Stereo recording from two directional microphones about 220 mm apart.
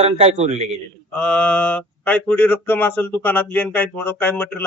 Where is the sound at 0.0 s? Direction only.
30° right (ahead or behind).